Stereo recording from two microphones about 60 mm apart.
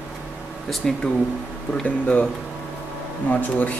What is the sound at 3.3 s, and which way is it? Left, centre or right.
Speech, left.